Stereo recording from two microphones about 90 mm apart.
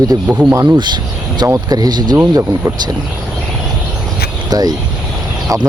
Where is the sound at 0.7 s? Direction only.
55° right (ahead or behind).